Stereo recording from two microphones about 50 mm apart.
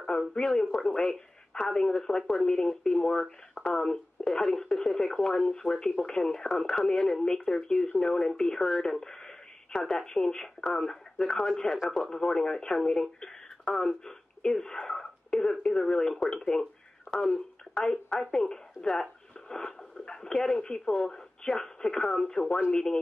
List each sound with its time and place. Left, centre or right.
0.0 s speech: centre